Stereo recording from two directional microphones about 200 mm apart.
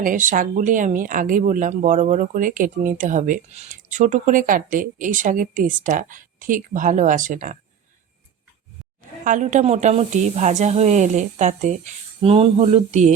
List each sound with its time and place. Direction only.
0.0 s speech: 40° right (ahead or behind)
9.2 s speech: 40° right (ahead or behind)